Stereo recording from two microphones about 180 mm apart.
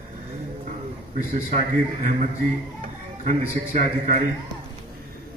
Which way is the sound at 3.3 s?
45° right (ahead or behind).